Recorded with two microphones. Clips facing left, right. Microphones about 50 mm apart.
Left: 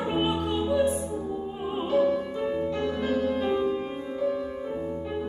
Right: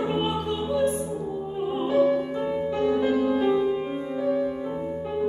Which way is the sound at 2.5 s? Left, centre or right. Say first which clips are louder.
Right 7 dB; centre.